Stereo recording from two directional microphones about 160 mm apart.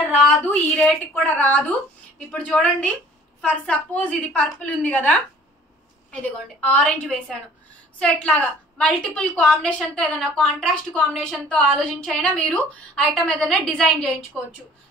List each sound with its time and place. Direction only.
0.2 s a woman's voice: 5° left (ahead or behind)
6.6 s a woman's voice: 5° left (ahead or behind)